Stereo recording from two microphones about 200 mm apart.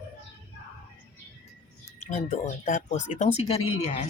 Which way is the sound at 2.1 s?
35° left (ahead or behind).